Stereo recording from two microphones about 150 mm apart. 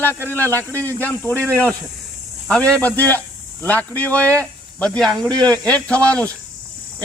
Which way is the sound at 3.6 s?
10° left (ahead or behind).